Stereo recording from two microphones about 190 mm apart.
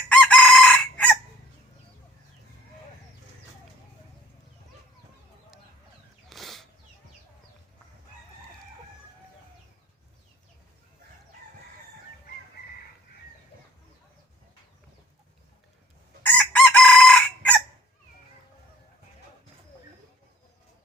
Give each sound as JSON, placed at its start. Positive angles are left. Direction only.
{"t": 0.1, "sound": "chicken", "side_deg": 5}
{"t": 6.2, "sound": "bird flight", "side_deg": 0}
{"t": 16.2, "sound": "chicken", "side_deg": 10}